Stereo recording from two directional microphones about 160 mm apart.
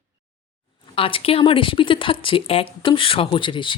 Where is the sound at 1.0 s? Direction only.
35° left (ahead or behind).